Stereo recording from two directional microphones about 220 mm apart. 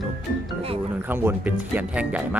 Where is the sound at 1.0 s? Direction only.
10° right (ahead or behind).